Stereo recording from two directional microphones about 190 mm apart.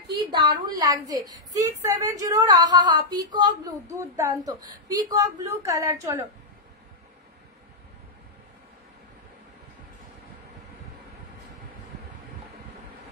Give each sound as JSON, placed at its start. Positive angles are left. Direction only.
{"t": 0.3, "sound": "a woman's voice", "side_deg": -20}